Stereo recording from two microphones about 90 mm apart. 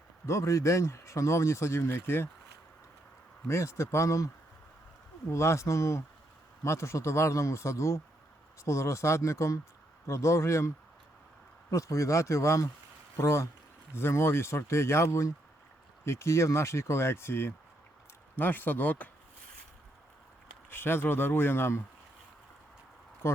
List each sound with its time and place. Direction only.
0.3 s speech: 35° left (ahead or behind)
3.4 s speech: 30° left (ahead or behind)
5.3 s speech: 30° left (ahead or behind)
11.7 s speech: 35° left (ahead or behind); by 19.1 s 15° left (ahead or behind)
20.7 s speech: 25° left (ahead or behind)
23.2 s speech: 25° left (ahead or behind)